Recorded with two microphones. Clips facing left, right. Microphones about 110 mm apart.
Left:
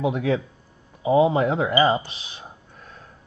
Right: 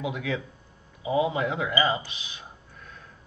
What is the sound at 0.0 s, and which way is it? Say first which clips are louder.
Speech: left 8 dB; 35° left (ahead or behind).